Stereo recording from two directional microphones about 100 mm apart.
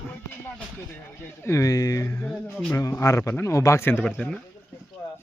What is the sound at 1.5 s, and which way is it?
Speech, 35° left (ahead or behind).